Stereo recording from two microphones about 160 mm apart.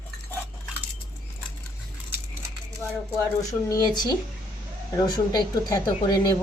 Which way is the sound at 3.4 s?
20° left (ahead or behind).